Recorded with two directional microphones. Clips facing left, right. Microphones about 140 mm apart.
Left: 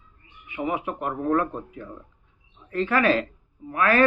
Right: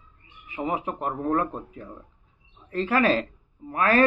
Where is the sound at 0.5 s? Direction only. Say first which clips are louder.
Left 1 dB; 35° right (ahead or behind).